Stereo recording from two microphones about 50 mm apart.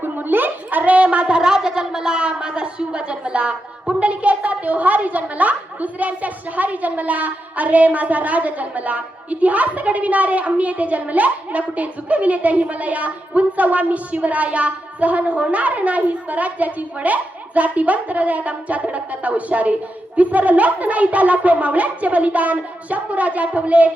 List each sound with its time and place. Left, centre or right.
0.0 s a woman's voice: right